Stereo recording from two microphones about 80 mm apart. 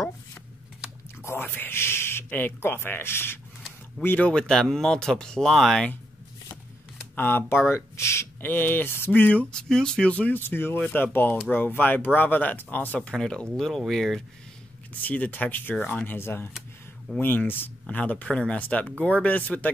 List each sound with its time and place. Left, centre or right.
1.2 s speech: left
4.3 s speech: centre
7.2 s speech: left
10.8 s speech: centre
13.1 s speech: centre
15.0 s speech: left